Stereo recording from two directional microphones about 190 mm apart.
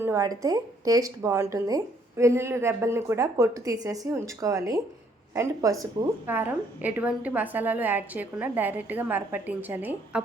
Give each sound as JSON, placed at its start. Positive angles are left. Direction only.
{"t": 0.0, "sound": "a woman's voice", "side_deg": -15}